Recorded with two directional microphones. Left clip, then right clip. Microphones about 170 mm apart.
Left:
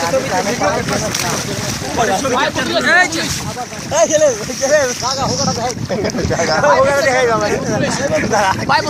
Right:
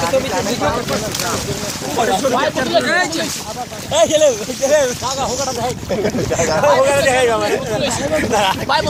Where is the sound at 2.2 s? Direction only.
55° left (ahead or behind).